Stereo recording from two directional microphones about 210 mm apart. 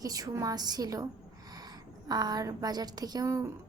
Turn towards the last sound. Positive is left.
turn(degrees=-15)  # may be behind; listen again after turning